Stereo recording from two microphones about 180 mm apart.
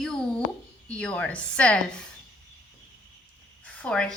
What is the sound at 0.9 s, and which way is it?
A woman's voice, 5° left (ahead or behind).